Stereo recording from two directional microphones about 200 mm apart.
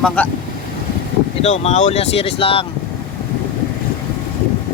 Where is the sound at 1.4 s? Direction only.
30° left (ahead or behind).